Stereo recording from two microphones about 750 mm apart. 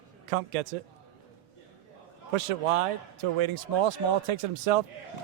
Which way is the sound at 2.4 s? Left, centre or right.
Right.